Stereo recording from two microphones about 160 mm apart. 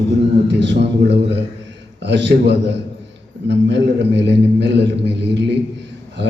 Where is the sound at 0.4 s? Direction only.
90° right.